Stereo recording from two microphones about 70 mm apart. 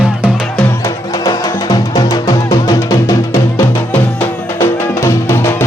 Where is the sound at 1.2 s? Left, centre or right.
Left.